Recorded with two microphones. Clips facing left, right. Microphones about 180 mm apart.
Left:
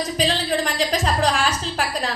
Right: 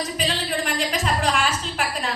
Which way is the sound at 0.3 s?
35° left (ahead or behind).